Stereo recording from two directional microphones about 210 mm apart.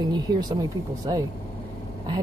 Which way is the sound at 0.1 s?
20° right (ahead or behind).